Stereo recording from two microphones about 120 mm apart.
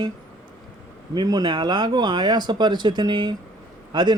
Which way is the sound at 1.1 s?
35° right (ahead or behind).